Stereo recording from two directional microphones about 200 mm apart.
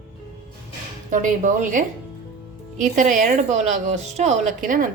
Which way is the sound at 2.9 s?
40° right (ahead or behind).